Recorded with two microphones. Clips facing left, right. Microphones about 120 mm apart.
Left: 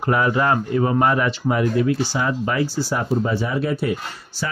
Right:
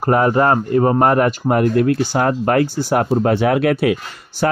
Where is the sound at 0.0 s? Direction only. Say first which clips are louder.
Right 5 dB; 45° right (ahead or behind); by 4.0 s 80° right.